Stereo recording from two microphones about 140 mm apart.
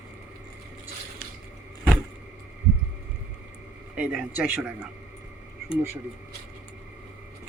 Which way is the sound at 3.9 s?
10° right (ahead or behind).